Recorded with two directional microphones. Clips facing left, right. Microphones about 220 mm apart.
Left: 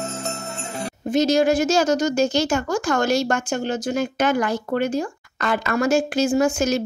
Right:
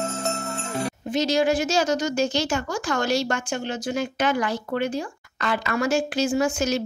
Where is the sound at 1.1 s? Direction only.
45° left (ahead or behind).